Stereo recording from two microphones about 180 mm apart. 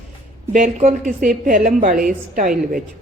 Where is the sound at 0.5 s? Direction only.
45° right (ahead or behind).